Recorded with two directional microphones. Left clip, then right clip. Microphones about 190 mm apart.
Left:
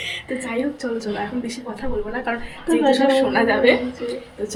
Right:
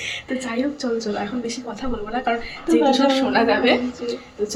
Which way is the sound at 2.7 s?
20° right (ahead or behind).